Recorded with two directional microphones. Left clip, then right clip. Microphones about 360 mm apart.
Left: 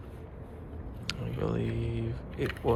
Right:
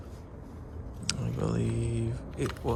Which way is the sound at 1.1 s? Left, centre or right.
Centre.